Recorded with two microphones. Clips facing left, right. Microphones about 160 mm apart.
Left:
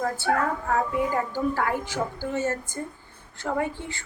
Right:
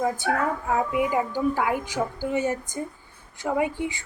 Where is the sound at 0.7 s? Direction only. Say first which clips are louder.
Right 2 dB; 15° right (ahead or behind).